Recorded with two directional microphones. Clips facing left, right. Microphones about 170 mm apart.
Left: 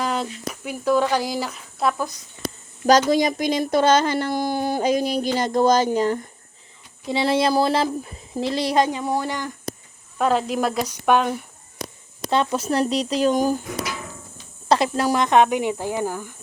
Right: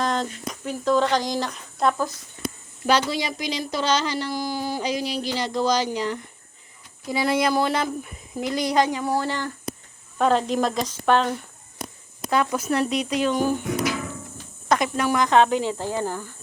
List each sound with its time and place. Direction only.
0.0 s speech: 10° left (ahead or behind)
2.8 s speech: 45° left (ahead or behind)
7.1 s speech: 25° left (ahead or behind)
10.2 s speech: 5° left (ahead or behind)
12.3 s speech: 25° left (ahead or behind)
14.7 s speech: 35° left (ahead or behind); by 16.3 s 10° left (ahead or behind)